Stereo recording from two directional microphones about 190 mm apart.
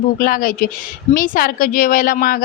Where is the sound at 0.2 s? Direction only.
45° left (ahead or behind).